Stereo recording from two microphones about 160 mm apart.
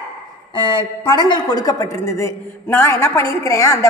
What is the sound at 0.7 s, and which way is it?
A woman's voice, 25° left (ahead or behind).